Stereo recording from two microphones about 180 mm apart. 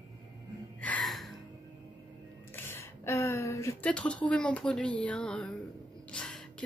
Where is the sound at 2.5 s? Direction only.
15° left (ahead or behind).